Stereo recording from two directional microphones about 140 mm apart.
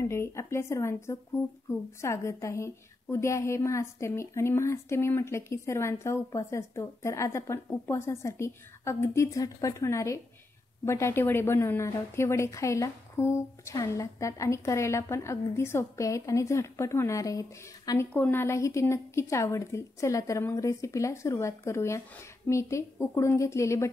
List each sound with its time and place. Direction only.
0.0 s a woman's voice: 20° left (ahead or behind)
18.1 s a woman's voice: 15° left (ahead or behind)